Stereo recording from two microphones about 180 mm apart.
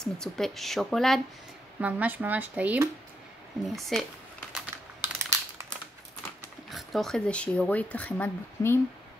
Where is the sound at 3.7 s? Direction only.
Centre (ahead or behind).